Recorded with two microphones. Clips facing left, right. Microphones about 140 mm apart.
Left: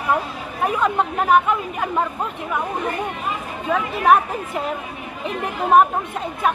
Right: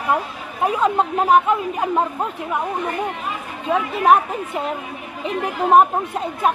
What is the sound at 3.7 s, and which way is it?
Speech, 20° right (ahead or behind).